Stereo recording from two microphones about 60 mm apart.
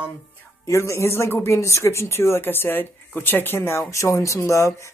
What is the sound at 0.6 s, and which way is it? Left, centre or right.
Speech, left.